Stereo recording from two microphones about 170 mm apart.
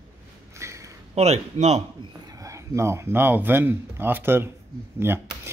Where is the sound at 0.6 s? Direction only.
15° right (ahead or behind).